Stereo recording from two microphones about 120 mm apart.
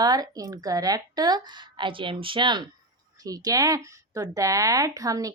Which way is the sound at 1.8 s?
45° right (ahead or behind).